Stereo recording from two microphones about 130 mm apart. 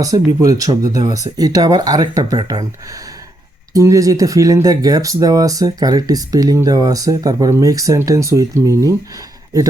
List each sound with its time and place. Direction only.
0.0 s speech: 30° right (ahead or behind)
3.7 s speech: 25° right (ahead or behind)